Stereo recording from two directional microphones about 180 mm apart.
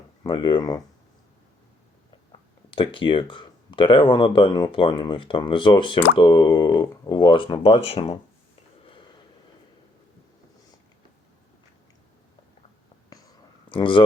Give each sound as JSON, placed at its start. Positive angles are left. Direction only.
{"t": 0.2, "sound": "speech", "side_deg": 25}
{"t": 2.3, "sound": "speech", "side_deg": 25}
{"t": 13.7, "sound": "speech", "side_deg": 25}